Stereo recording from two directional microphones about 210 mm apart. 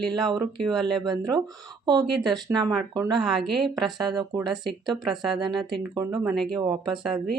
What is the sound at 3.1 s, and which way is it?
A woman's voice, centre (ahead or behind).